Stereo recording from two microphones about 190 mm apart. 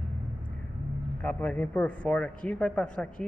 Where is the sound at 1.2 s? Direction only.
5° left (ahead or behind).